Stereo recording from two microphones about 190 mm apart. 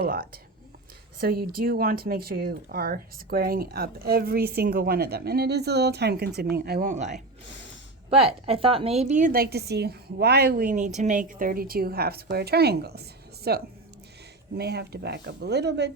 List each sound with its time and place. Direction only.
1.2 s speech: 55° right (ahead or behind)
6.8 s speech: 40° right (ahead or behind); by 15.9 s 60° right (ahead or behind)